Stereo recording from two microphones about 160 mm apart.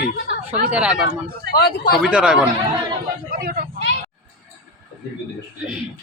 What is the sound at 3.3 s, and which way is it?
Speech, 65° right (ahead or behind).